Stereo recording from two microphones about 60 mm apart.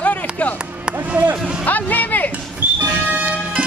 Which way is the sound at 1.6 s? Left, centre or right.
Left.